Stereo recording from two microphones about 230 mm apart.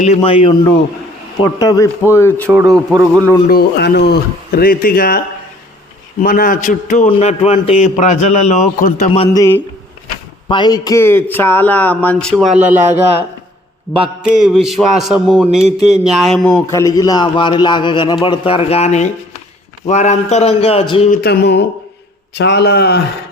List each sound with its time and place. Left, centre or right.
0.0 s speech: left; by 2.5 s centre
2.5 s speech: centre
3.5 s speech: left
6.2 s speech: left; by 12.8 s centre
12.8 s a man's voice: right
14.0 s a man's voice: centre; by 21.1 s left
21.1 s a man's voice: left